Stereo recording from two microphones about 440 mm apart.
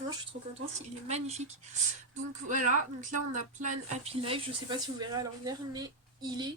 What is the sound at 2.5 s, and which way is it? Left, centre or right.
Speech, centre.